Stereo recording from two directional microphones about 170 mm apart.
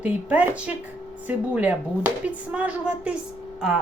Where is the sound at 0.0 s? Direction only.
10° right (ahead or behind).